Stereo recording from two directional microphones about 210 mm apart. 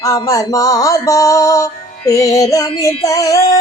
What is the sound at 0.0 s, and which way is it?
Speech, 15° left (ahead or behind).